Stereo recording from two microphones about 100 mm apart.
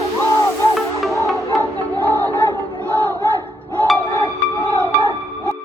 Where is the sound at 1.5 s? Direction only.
20° left (ahead or behind).